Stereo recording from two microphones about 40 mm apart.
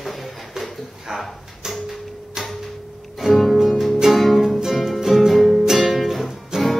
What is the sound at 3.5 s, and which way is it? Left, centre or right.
Music, centre.